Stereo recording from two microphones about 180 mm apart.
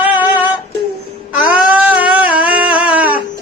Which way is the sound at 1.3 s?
5° right (ahead or behind).